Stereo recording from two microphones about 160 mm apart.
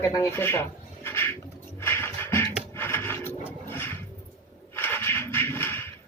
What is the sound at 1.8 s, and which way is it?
Music, 15° left (ahead or behind).